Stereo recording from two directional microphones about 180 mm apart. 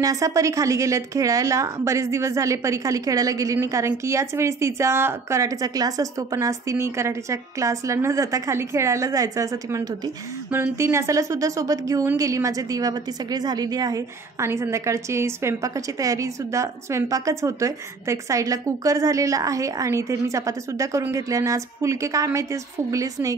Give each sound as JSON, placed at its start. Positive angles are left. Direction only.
{"t": 0.0, "sound": "a woman's voice", "side_deg": -20}